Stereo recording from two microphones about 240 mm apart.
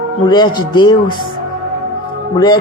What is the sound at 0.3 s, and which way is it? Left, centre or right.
Speech, centre.